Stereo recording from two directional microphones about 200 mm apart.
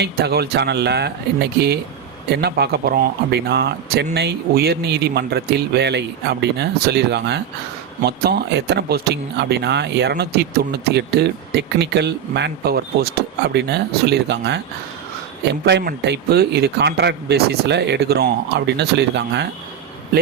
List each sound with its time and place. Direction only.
0.0 s speech: 50° right (ahead or behind)
15.6 s speech: 50° right (ahead or behind)